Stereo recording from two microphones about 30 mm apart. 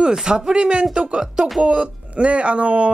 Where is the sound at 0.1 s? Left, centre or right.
Right.